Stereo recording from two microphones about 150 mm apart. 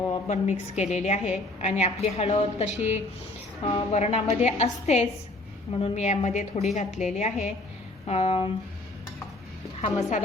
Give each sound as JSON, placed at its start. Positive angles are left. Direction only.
{"t": 0.1, "sound": "a woman's voice", "side_deg": 45}
{"t": 9.8, "sound": "a woman's voice", "side_deg": 55}